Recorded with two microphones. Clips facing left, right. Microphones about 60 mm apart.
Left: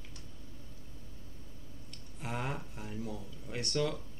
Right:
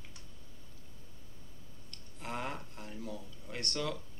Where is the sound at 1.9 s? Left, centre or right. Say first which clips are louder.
Left 1 dB; centre.